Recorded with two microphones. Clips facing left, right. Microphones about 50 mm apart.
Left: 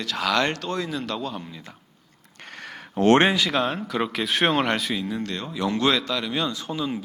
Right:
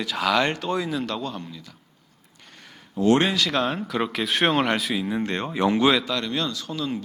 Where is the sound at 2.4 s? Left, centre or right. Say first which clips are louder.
Left 9 dB; left.